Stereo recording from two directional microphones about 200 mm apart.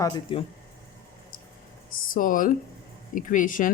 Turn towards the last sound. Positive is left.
turn(degrees=40)  # may be behind; listen again after turning